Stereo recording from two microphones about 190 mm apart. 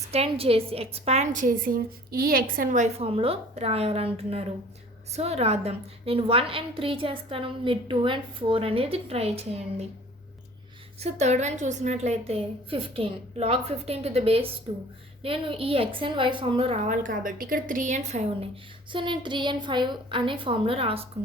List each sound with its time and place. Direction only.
0.1 s a woman's voice: 30° right (ahead or behind)
11.0 s a woman's voice: 35° right (ahead or behind)
18.9 s a woman's voice: 25° right (ahead or behind)